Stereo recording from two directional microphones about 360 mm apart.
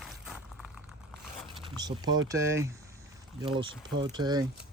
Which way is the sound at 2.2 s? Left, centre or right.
Centre.